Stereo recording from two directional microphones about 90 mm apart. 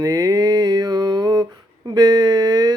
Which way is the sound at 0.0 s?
45° right (ahead or behind).